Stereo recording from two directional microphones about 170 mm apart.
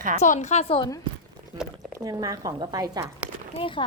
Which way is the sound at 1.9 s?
20° right (ahead or behind).